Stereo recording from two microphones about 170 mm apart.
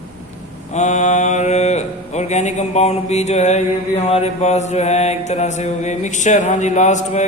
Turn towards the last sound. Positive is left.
turn(degrees=45)  # may be behind; listen again after turning